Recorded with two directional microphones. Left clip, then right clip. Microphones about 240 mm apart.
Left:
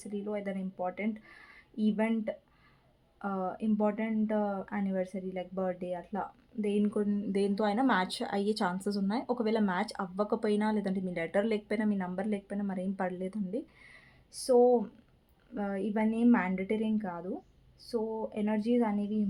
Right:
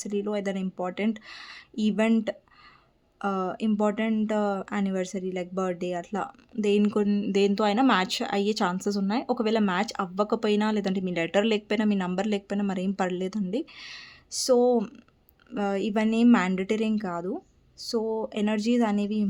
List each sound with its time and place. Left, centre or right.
0.0 s speech: right